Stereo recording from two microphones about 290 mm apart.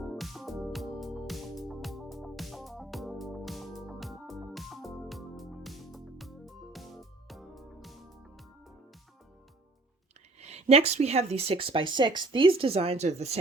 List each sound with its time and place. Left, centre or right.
0.2 s music: centre
10.4 s speech: right